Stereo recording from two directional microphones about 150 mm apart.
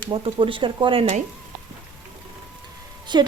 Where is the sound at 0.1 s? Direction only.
35° right (ahead or behind).